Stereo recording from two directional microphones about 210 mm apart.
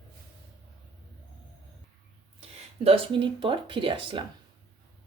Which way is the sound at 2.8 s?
25° right (ahead or behind).